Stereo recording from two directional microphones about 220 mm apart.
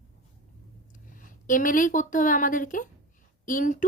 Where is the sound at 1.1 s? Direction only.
40° left (ahead or behind).